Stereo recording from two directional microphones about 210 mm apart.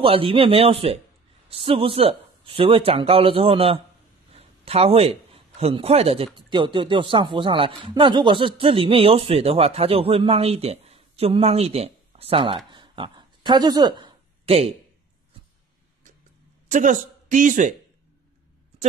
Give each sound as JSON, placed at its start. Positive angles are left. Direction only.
{"t": 0.0, "sound": "a man's voice", "side_deg": -25}
{"t": 16.7, "sound": "speech", "side_deg": -35}